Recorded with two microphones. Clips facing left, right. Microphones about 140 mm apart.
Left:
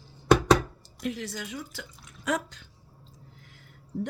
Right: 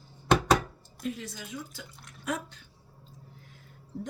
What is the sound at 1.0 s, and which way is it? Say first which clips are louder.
Speech: left 3 dB; 80° left.